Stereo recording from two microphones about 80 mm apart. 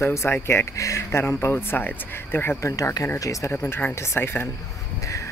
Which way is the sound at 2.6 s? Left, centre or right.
Left.